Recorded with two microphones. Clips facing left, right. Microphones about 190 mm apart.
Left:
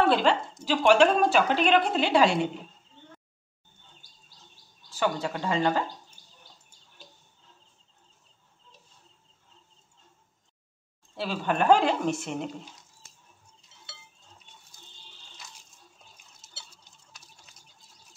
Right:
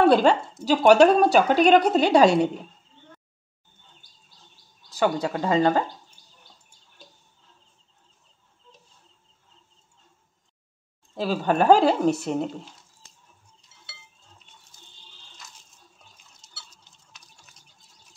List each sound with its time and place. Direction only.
0.0 s speech: 45° right (ahead or behind)
4.8 s speech: 40° right (ahead or behind)
11.1 s speech: 40° right (ahead or behind)